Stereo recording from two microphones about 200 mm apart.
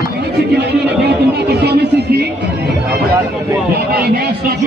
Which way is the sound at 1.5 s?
55° right (ahead or behind).